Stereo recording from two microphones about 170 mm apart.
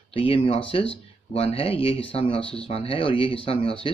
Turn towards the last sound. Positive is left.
turn(degrees=30)  # may be behind; listen again after turning